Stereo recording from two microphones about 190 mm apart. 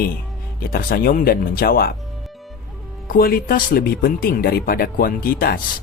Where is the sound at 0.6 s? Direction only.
50° left (ahead or behind).